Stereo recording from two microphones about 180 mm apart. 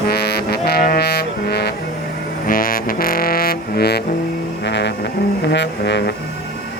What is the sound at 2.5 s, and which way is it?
Music, 50° left (ahead or behind).